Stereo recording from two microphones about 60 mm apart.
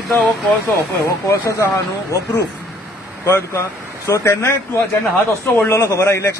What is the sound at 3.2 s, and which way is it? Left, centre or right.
A man's voice, left.